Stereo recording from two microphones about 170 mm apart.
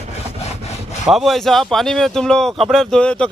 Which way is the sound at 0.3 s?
40° left (ahead or behind).